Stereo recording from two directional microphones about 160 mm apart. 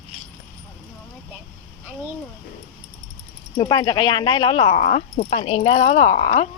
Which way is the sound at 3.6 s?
25° left (ahead or behind).